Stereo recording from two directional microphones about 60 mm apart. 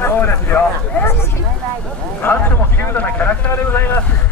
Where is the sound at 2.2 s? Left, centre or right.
Left.